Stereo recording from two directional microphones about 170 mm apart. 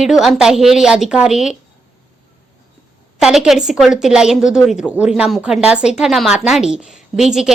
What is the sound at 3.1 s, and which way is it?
A woman's voice, 5° right (ahead or behind).